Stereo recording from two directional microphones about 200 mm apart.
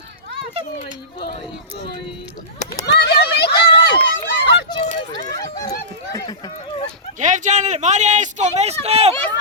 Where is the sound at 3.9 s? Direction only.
25° left (ahead or behind).